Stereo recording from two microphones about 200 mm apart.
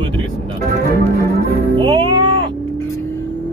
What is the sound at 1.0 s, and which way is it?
Music, 50° right (ahead or behind).